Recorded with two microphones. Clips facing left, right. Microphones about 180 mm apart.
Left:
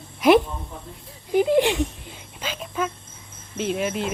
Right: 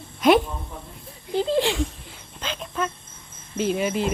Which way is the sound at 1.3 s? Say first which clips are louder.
Left 4 dB; 15° left (ahead or behind).